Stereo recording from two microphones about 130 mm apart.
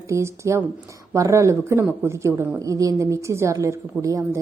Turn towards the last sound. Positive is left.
turn(degrees=-25)  # may be behind; listen again after turning